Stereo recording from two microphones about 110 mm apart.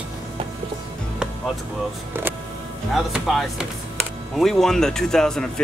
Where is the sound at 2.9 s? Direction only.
5° right (ahead or behind).